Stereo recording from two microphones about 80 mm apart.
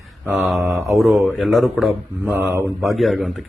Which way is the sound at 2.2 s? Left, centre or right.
Right.